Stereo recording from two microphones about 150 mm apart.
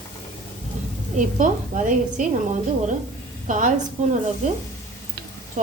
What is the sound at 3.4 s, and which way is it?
Speech, 60° right (ahead or behind).